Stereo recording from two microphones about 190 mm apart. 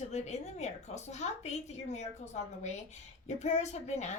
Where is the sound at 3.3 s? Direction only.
35° left (ahead or behind).